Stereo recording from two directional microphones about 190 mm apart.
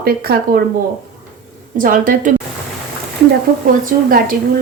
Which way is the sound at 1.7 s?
45° right (ahead or behind).